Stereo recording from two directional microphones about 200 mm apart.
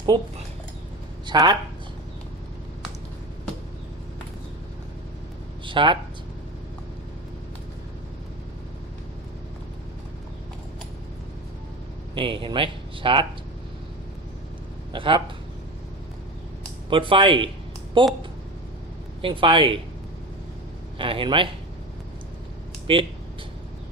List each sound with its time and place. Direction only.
1.3 s speech: 20° right (ahead or behind)
5.6 s speech: 25° right (ahead or behind)
12.1 s speech: 25° right (ahead or behind)
14.9 s speech: 25° right (ahead or behind)
16.9 s speech: 25° right (ahead or behind)
19.2 s speech: 25° right (ahead or behind)
21.0 s speech: 25° right (ahead or behind)
22.9 s speech: 25° right (ahead or behind)